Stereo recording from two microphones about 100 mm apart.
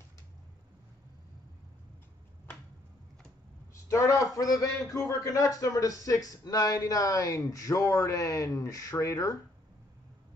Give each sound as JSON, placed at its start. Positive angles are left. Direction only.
{"t": 3.9, "sound": "a man's voice", "side_deg": 35}